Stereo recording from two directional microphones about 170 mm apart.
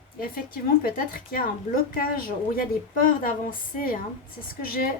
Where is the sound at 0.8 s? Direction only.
55° left (ahead or behind).